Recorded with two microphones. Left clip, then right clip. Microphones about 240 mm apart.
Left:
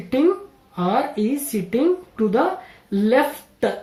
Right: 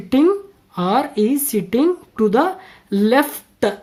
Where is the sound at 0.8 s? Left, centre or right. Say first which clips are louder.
Right 3 dB; right.